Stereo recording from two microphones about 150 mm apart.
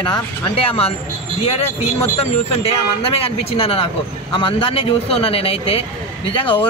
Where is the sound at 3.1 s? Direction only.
40° left (ahead or behind).